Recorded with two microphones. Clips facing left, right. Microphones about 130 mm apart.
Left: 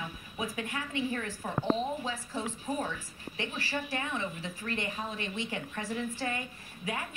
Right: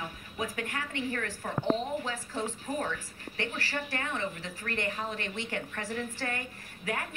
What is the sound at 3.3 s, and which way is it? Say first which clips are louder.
A woman's voice: right 1 dB; 20° left (ahead or behind).